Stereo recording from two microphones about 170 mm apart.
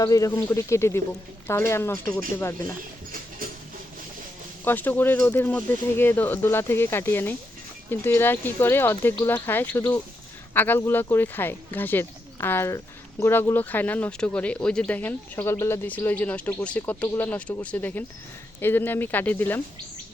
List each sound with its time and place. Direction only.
0.0 s a man's voice: 20° left (ahead or behind)
4.6 s speech: 10° left (ahead or behind)